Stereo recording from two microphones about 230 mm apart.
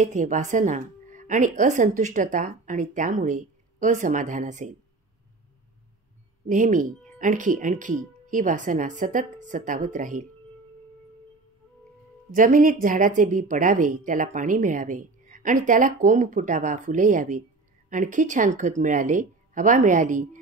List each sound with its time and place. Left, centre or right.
0.0 s a woman's voice: right
6.4 s a woman's voice: right
12.3 s a woman's voice: right